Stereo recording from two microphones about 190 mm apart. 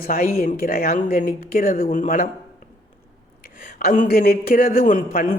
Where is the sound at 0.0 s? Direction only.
50° left (ahead or behind).